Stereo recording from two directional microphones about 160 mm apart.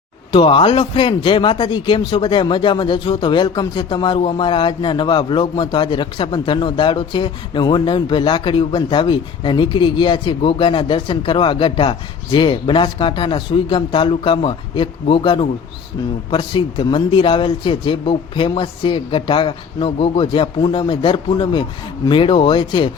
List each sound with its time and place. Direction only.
0.3 s a man's voice: 30° left (ahead or behind)